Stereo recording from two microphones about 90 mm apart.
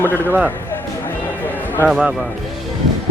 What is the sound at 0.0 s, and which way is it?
Speech, 25° left (ahead or behind).